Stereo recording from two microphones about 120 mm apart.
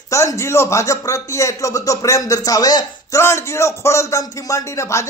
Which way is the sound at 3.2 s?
20° left (ahead or behind).